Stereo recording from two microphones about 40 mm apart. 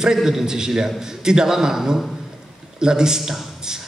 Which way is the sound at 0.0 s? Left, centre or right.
Centre.